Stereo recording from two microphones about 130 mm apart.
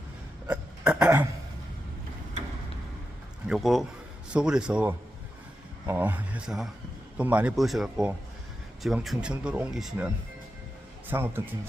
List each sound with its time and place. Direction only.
0.4 s a sound: 10° right (ahead or behind)
3.4 s speech: centre (ahead or behind)
11.1 s speech: 15° right (ahead or behind)